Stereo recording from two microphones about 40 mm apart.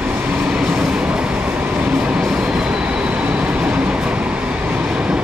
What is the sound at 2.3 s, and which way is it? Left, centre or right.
Train, right.